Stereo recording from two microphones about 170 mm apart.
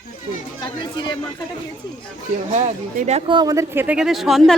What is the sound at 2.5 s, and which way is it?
Speech, 45° right (ahead or behind).